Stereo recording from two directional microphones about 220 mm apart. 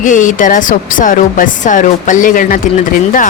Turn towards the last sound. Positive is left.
turn(degrees=35)  # may be behind; listen again after turning